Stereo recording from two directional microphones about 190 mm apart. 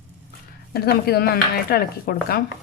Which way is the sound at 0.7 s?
55° left (ahead or behind).